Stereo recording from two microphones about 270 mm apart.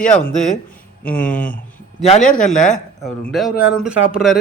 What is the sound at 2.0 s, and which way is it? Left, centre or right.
Speech, left.